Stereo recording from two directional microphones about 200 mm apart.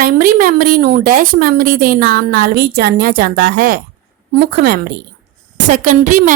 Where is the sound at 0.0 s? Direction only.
45° right (ahead or behind).